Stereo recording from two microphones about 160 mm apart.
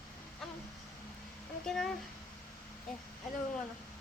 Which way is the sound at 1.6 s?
5° left (ahead or behind).